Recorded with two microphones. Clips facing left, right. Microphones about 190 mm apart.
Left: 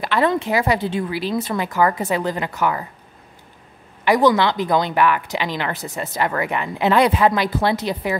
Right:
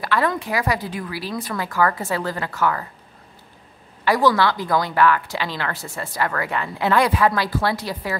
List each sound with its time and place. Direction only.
0.0 s speech: 20° left (ahead or behind)
4.0 s speech: 20° left (ahead or behind)